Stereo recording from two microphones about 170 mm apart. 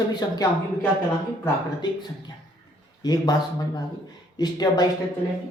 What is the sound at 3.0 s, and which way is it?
Speech, 25° left (ahead or behind).